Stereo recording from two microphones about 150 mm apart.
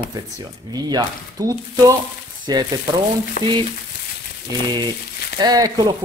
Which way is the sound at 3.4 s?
65° left (ahead or behind).